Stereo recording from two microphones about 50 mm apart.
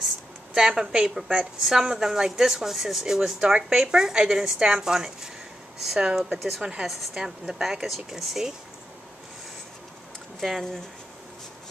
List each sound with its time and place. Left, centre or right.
0.6 s speech: centre
1.4 s speech: centre
3.3 s speech: centre
6.0 s speech: centre
6.3 s speech: centre
6.6 s speech: centre
7.8 s speech: centre